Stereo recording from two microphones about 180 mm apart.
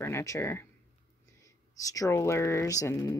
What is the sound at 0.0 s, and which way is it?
Speech, 15° left (ahead or behind).